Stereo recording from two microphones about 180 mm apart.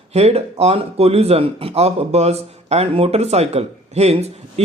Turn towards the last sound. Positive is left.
turn(degrees=-35)  # may be behind; listen again after turning